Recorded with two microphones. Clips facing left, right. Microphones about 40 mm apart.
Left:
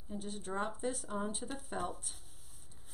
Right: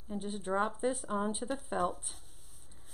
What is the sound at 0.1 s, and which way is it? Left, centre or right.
Speech, centre.